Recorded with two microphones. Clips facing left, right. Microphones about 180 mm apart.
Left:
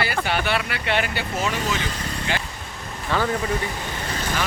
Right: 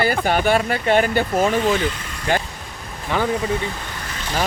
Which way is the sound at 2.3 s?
50° right (ahead or behind).